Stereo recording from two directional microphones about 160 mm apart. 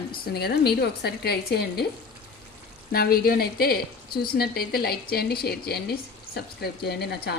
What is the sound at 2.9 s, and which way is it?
A woman's voice, 70° left (ahead or behind).